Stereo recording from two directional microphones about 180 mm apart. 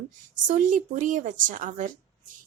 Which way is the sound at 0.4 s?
45° right (ahead or behind).